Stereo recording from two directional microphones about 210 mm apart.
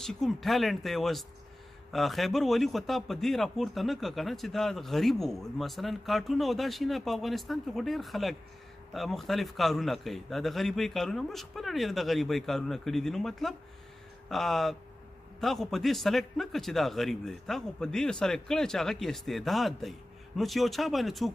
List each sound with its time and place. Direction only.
0.0 s a man's voice: centre (ahead or behind)